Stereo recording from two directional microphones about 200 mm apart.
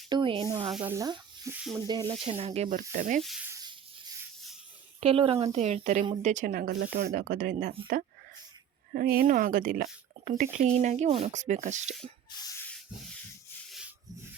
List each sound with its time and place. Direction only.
0.1 s speech: 25° right (ahead or behind)
0.7 s speech: 10° right (ahead or behind); by 3.2 s 40° right (ahead or behind)
3.2 s speech: centre (ahead or behind)
3.5 s a sound: 20° right (ahead or behind)
4.9 s speech: 30° right (ahead or behind); by 7.7 s 45° right (ahead or behind)
9.0 s speech: 50° right (ahead or behind)
12.3 s rub: 20° left (ahead or behind)
13.7 s rub: 5° right (ahead or behind)